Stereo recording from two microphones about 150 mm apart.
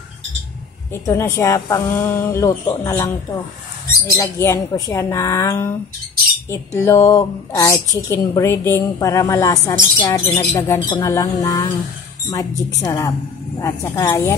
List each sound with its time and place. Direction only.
0.9 s a woman's voice: 20° left (ahead or behind)
6.8 s a woman's voice: 20° left (ahead or behind)